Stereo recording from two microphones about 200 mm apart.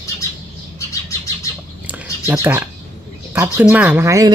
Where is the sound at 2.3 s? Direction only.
10° right (ahead or behind).